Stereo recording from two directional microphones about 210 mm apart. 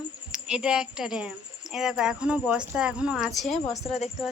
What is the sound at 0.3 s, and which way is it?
Speech, 5° right (ahead or behind).